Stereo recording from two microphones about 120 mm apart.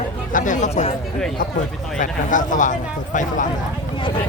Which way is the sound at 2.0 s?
90° left.